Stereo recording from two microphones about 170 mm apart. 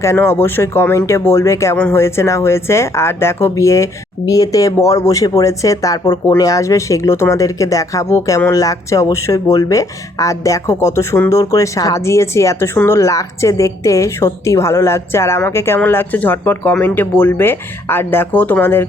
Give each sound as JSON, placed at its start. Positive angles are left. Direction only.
{"t": 0.0, "sound": "speech", "side_deg": 15}